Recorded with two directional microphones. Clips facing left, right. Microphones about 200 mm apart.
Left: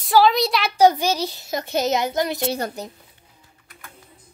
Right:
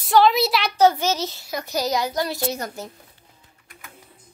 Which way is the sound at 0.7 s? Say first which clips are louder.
Left 2 dB; 15° left (ahead or behind).